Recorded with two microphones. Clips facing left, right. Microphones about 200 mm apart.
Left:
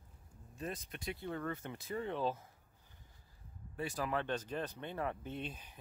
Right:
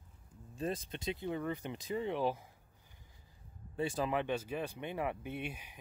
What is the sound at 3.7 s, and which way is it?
Speech, 25° right (ahead or behind).